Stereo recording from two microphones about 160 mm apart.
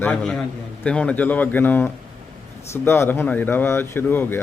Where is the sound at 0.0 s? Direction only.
5° left (ahead or behind).